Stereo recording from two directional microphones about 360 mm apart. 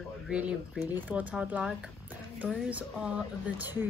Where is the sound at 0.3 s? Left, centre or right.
Centre.